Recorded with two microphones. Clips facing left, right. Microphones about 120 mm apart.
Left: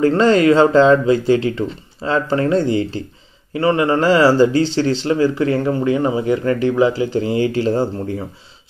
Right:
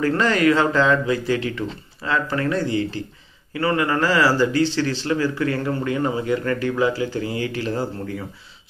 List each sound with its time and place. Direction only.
0.0 s speech: 25° left (ahead or behind)